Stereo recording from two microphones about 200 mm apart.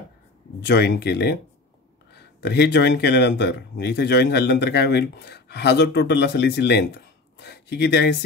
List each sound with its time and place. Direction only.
0.6 s speech: 60° left (ahead or behind)
2.4 s speech: 55° left (ahead or behind)